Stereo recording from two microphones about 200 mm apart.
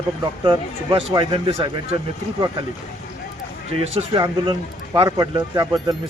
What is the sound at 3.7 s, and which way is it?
A man's voice, 25° right (ahead or behind).